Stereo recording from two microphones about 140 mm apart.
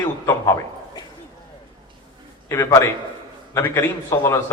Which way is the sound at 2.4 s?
20° left (ahead or behind).